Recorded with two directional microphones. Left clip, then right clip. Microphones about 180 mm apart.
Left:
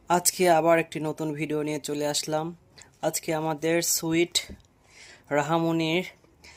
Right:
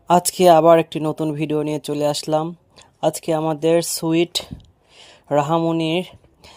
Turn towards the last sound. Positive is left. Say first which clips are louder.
# right 5 dB
turn(degrees=-30)  # may be behind; listen again after turning